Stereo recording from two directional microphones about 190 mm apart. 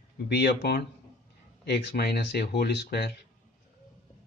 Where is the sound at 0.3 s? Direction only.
60° left (ahead or behind).